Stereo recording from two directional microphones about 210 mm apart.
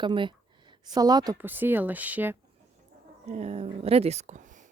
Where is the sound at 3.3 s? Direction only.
30° right (ahead or behind).